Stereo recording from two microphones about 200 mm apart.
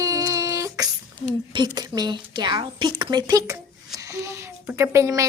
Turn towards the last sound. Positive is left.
turn(degrees=-15)  # may be behind; listen again after turning